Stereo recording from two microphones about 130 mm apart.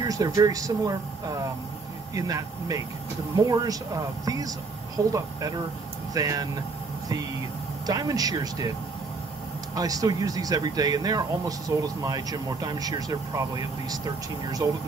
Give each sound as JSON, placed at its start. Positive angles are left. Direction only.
{"t": 0.0, "sound": "speech", "side_deg": -30}
{"t": 7.8, "sound": "speech", "side_deg": -30}
{"t": 9.8, "sound": "speech", "side_deg": -30}